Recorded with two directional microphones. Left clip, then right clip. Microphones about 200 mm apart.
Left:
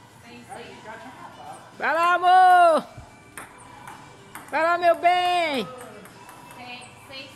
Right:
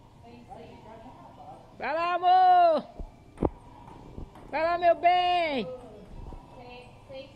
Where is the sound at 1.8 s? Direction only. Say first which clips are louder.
Left 8 dB; 50° left (ahead or behind).